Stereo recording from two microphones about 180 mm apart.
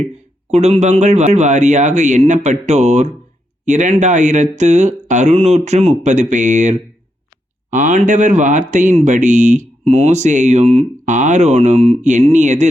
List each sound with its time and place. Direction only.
0.5 s speech: 35° right (ahead or behind)